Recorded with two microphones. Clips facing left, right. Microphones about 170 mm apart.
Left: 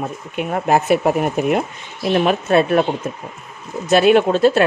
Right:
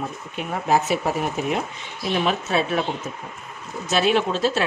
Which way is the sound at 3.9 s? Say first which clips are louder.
Left 8 dB; 55° left (ahead or behind).